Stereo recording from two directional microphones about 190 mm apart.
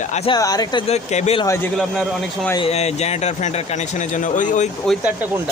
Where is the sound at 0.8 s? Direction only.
35° left (ahead or behind).